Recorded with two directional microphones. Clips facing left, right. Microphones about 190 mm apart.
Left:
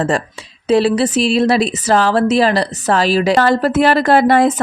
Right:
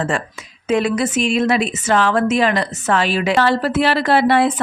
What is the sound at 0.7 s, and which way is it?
A woman's voice, 35° left (ahead or behind).